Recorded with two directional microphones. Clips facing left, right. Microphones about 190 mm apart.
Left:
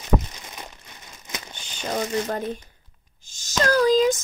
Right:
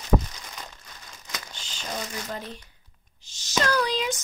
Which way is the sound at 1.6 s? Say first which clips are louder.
Left 8 dB; 55° left (ahead or behind).